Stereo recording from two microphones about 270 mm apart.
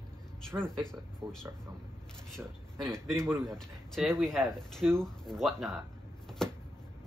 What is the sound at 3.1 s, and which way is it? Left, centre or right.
Speech, centre.